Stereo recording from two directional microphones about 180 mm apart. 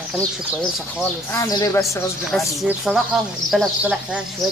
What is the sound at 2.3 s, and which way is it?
Speech, centre (ahead or behind).